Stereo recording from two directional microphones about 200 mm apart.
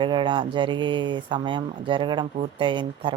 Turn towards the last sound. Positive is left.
turn(degrees=-25)  # may be behind; listen again after turning